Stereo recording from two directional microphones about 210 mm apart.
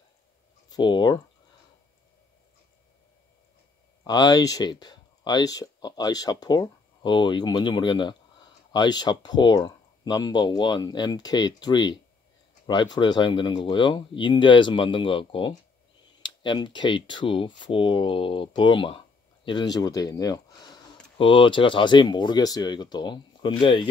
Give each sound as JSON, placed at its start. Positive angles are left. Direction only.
{"t": 0.7, "sound": "speech", "side_deg": 20}
{"t": 4.0, "sound": "speech", "side_deg": 20}